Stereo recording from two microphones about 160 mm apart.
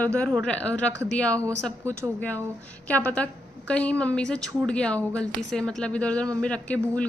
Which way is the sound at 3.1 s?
10° left (ahead or behind).